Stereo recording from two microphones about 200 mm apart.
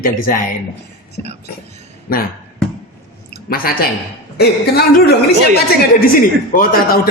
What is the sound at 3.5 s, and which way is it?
A woman's voice, 50° left (ahead or behind).